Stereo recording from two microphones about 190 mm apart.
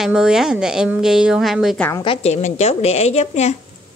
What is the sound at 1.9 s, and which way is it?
A woman's voice, 30° left (ahead or behind).